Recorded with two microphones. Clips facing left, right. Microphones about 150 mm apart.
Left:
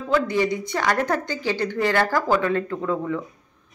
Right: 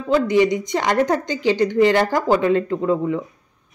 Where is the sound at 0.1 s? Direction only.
20° right (ahead or behind).